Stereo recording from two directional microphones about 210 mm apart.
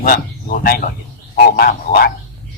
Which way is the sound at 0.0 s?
45° left (ahead or behind).